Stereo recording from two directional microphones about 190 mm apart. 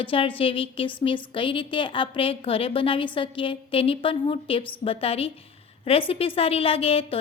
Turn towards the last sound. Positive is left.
turn(degrees=30)  # may be behind; listen again after turning